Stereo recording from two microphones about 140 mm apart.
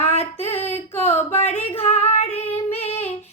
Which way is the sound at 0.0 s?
50° left (ahead or behind).